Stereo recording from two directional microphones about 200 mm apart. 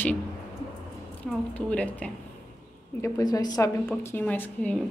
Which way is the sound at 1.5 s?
5° left (ahead or behind).